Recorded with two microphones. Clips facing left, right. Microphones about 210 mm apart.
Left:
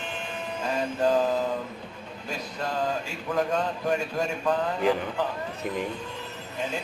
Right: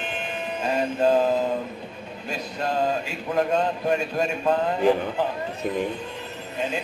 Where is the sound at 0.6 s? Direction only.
20° right (ahead or behind).